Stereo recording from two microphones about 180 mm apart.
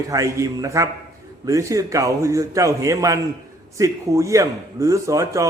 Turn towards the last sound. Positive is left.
turn(degrees=-15)  # may be behind; listen again after turning